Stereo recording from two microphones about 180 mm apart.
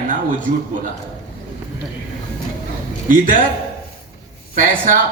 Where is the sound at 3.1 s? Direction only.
45° right (ahead or behind).